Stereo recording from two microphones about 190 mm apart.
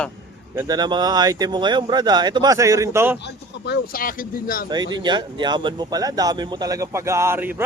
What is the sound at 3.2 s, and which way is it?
Speech, 60° left (ahead or behind).